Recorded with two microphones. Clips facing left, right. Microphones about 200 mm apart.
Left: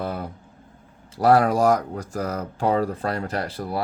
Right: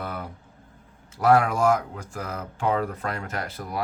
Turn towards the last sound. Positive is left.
turn(degrees=35)  # may be behind; listen again after turning